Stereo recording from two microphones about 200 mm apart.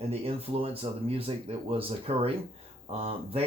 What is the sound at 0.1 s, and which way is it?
Speech, 30° right (ahead or behind).